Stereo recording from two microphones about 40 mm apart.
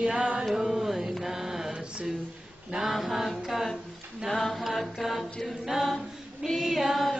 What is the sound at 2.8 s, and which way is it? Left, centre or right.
A capella, centre.